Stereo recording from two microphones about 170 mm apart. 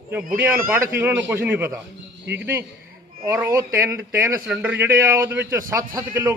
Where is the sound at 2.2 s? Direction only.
90° right.